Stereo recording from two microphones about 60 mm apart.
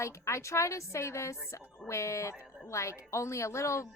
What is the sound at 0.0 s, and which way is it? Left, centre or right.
A woman's voice, left.